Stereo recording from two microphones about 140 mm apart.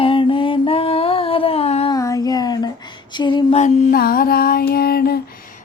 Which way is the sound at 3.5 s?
70° left (ahead or behind).